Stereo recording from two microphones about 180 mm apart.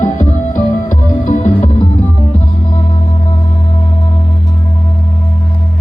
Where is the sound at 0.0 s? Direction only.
45° left (ahead or behind).